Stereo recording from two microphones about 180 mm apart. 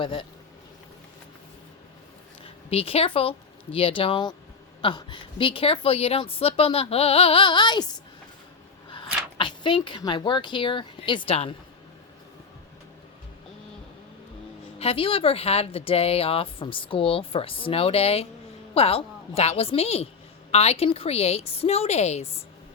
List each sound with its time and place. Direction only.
0.0 s speech: 30° left (ahead or behind)
2.4 s speech: 35° left (ahead or behind)
8.9 s speech: 25° left (ahead or behind)
14.8 s speech: 30° left (ahead or behind)